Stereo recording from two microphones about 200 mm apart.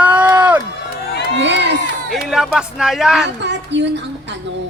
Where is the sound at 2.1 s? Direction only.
Centre (ahead or behind).